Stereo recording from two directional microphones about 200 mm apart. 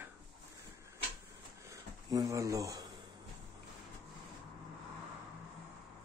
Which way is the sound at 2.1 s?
15° right (ahead or behind).